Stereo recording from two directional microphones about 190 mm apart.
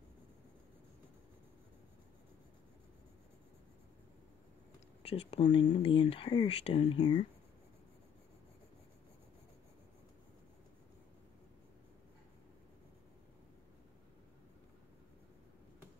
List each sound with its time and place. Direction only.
5.0 s speech: 30° left (ahead or behind)